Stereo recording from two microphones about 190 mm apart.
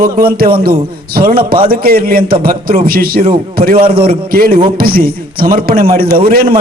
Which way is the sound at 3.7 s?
30° right (ahead or behind).